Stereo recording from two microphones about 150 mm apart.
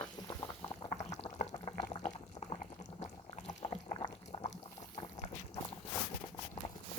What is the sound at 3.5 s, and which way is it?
Rowboat, 50° left (ahead or behind).